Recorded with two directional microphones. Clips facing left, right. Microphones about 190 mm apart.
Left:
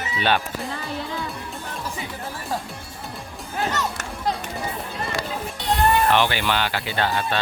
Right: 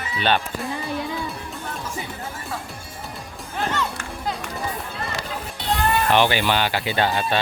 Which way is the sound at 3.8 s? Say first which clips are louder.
Even; 40° left (ahead or behind).